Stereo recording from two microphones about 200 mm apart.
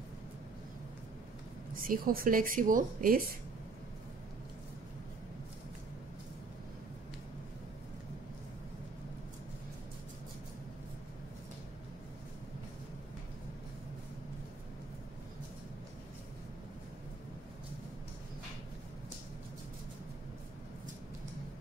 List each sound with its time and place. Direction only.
1.8 s a woman's voice: 45° right (ahead or behind)